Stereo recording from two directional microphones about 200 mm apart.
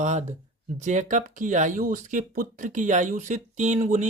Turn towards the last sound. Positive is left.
turn(degrees=-40)  # may be behind; listen again after turning